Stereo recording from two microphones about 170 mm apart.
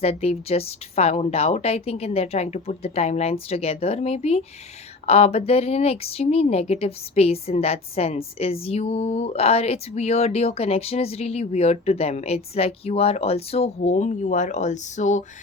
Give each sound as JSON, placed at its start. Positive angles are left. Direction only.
{"t": 0.0, "sound": "a woman's voice", "side_deg": 35}